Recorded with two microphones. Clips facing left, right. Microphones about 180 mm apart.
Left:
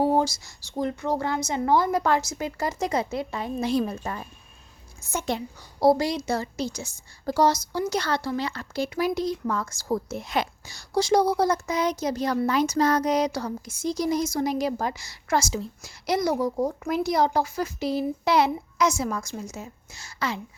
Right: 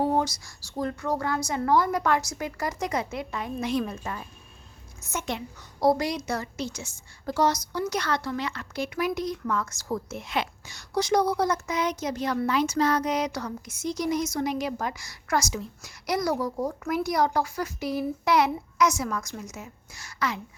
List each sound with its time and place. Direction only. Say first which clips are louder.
0.2 s a woman's voice: left 3 dB; 25° left (ahead or behind)